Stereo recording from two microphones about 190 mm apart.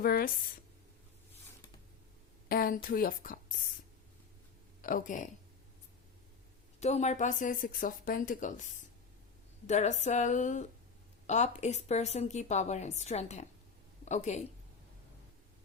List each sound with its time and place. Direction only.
0.0 s a woman's voice: 50° left (ahead or behind)
2.5 s a woman's voice: 50° left (ahead or behind)
4.8 s a woman's voice: 45° left (ahead or behind)
6.7 s a woman's voice: 35° left (ahead or behind)
9.6 s a woman's voice: 40° left (ahead or behind)